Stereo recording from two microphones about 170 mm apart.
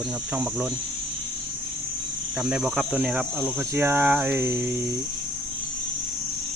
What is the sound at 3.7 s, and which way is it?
Cricket, 15° right (ahead or behind).